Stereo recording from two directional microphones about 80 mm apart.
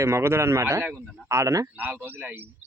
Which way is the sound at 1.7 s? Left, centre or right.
Right.